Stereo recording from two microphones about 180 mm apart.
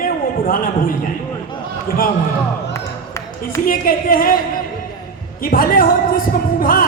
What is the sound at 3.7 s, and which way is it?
Speech, 50° left (ahead or behind).